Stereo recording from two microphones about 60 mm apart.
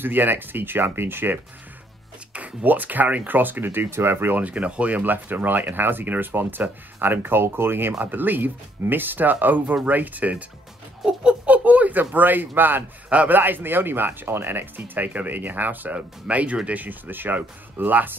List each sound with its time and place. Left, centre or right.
0.0 s speech: right
4.4 s speech: right
11.4 s speech: right